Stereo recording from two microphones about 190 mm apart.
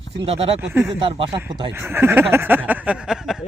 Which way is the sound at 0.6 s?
10° right (ahead or behind).